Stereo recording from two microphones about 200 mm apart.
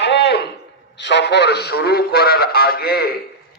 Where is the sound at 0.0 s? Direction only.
60° left (ahead or behind).